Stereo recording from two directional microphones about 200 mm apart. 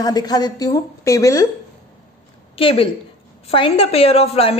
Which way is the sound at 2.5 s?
25° left (ahead or behind).